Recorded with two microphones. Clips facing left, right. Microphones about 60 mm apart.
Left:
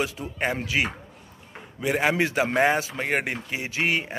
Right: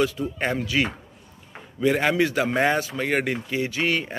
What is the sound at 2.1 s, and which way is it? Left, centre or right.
Speech, left.